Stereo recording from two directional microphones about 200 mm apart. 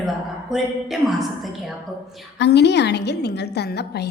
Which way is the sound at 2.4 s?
60° left (ahead or behind).